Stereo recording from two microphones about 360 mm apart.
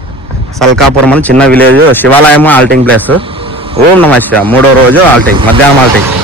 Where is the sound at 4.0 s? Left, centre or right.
Centre.